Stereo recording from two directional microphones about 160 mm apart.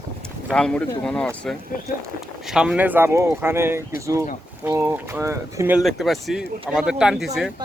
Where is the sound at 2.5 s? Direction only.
5° right (ahead or behind).